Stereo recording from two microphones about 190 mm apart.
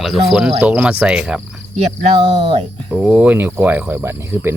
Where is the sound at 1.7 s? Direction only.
35° right (ahead or behind).